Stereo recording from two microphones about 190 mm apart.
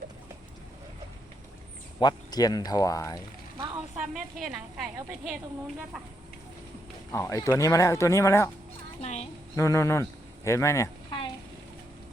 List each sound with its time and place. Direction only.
2.0 s speech: 20° left (ahead or behind)
3.9 s a woman's voice: centre (ahead or behind)
7.1 s speech: 15° left (ahead or behind)
9.0 s a sound: 35° left (ahead or behind)
9.6 s speech: 15° left (ahead or behind)